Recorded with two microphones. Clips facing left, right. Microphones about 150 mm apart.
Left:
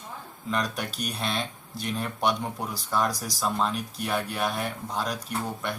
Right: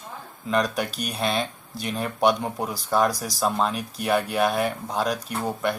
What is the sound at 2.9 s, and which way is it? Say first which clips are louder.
Speech: right 5 dB; 65° right (ahead or behind).